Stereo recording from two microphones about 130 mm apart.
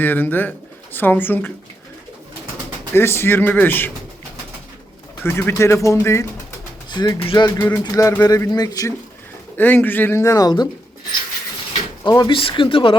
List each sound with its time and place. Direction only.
0.0 s speech: 15° left (ahead or behind)
2.9 s speech: 20° left (ahead or behind)
5.2 s pigeon: 20° left (ahead or behind)
6.9 s speech: 30° left (ahead or behind)
7.7 s pigeon: 25° left (ahead or behind)
9.6 s speech: 15° left (ahead or behind); by 10.7 s 30° left (ahead or behind)
12.0 s speech: 35° left (ahead or behind)